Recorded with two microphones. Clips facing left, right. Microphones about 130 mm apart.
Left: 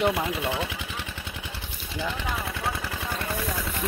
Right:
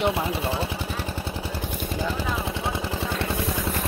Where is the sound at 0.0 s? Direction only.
30° right (ahead or behind).